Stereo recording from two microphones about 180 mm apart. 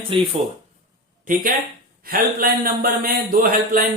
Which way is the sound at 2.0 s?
55° right (ahead or behind).